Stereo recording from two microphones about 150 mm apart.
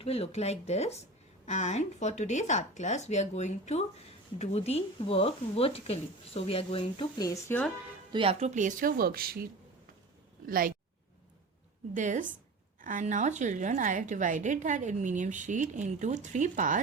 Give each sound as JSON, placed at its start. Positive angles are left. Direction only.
{"t": 0.0, "sound": "speech", "side_deg": 40}
{"t": 8.1, "sound": "speech", "side_deg": -40}
{"t": 10.4, "sound": "speech", "side_deg": -70}
{"t": 11.9, "sound": "a woman's voice", "side_deg": -60}